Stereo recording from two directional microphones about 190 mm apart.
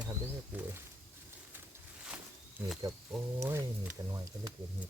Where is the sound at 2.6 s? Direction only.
10° right (ahead or behind).